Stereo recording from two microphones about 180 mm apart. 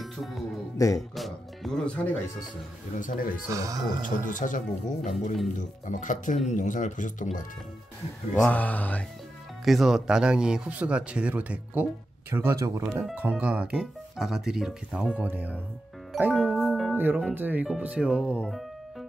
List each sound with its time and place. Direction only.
0.0 s music: centre (ahead or behind)
0.9 s speech: centre (ahead or behind)
3.0 s speech: 50° left (ahead or behind)
3.5 s speech: 20° right (ahead or behind)
4.2 s speech: 45° left (ahead or behind)
8.4 s mantra: 10° left (ahead or behind)
9.7 s speech: centre (ahead or behind); by 12.9 s 15° right (ahead or behind)
12.9 s speech: 5° right (ahead or behind)
16.1 s music: 5° right (ahead or behind)
16.9 s speech: 10° right (ahead or behind)